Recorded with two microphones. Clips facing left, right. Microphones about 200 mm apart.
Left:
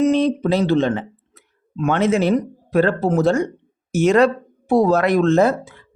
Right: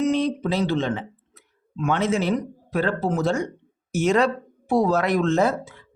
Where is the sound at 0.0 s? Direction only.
55° left (ahead or behind).